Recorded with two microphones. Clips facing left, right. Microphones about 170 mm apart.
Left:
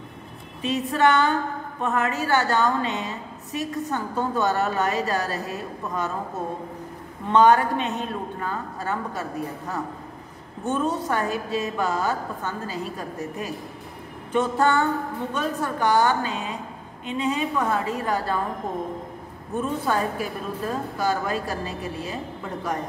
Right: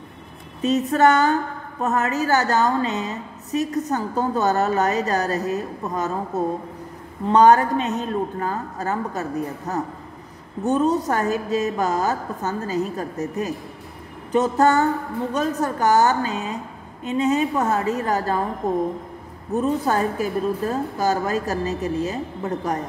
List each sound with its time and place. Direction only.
0.6 s a woman's voice: 40° right (ahead or behind)